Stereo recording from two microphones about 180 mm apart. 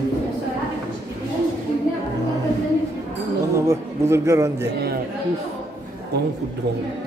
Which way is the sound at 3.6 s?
15° right (ahead or behind).